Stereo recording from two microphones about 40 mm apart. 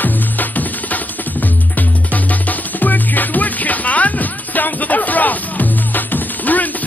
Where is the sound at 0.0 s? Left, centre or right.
Left.